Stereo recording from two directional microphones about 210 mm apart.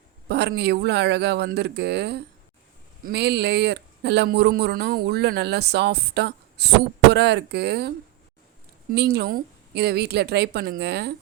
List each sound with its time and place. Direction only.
0.3 s speech: 50° right (ahead or behind)